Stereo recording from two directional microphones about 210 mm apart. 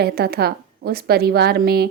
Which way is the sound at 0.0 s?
50° right (ahead or behind).